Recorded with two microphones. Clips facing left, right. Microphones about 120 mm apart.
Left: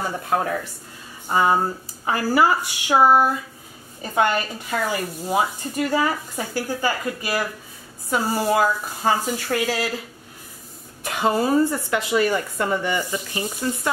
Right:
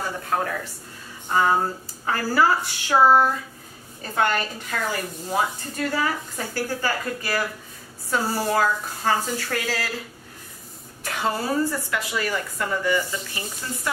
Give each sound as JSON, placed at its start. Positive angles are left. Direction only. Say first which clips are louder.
{"t": 1.3, "sound": "speech", "louder": "left 2 dB", "side_deg": 15}
{"t": 11.1, "sound": "a woman's voice", "louder": "left 5 dB", "side_deg": 20}